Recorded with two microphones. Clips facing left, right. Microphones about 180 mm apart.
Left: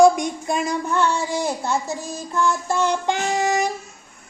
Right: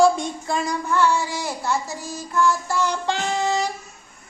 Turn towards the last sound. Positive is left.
turn(degrees=15)  # may be behind; listen again after turning